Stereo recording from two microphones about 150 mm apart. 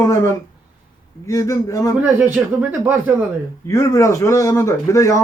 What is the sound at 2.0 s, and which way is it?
Speech, 10° right (ahead or behind).